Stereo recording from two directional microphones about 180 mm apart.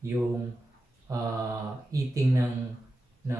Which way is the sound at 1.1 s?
20° right (ahead or behind).